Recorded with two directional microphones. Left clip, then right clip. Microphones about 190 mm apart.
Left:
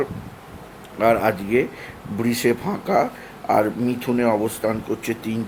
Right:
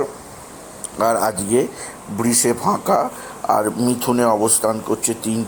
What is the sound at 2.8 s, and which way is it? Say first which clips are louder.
Speech: right 2 dB; 15° right (ahead or behind).